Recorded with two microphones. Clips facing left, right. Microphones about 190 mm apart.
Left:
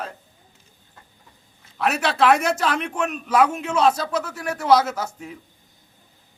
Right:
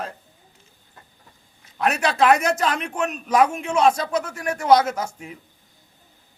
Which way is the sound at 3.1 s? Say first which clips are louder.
Even; 10° right (ahead or behind).